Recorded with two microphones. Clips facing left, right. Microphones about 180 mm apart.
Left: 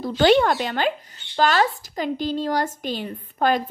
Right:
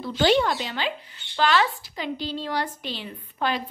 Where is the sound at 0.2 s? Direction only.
55° left (ahead or behind).